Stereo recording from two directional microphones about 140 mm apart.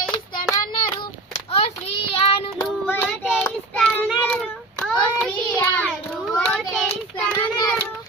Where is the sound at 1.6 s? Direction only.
45° left (ahead or behind).